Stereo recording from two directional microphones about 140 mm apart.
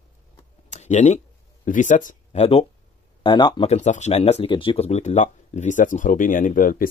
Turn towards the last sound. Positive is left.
turn(degrees=80)